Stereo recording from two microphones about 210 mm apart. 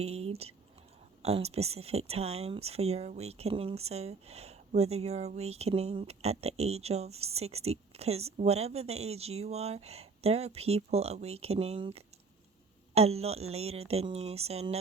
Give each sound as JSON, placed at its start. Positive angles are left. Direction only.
{"t": 0.0, "sound": "speech", "side_deg": -30}